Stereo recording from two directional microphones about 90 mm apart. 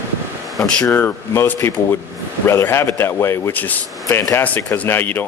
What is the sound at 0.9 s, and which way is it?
Speech, 25° left (ahead or behind).